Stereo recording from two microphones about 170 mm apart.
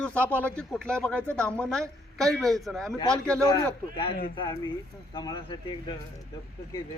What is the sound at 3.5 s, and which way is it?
Speech, 25° left (ahead or behind).